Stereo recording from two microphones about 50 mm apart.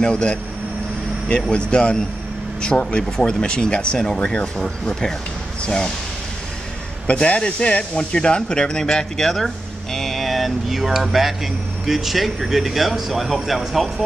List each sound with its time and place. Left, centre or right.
0.0 s speech: centre
7.1 s speech: left; by 13.8 s centre